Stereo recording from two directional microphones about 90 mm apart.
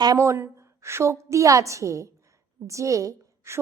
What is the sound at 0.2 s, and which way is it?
A woman's voice, 30° right (ahead or behind).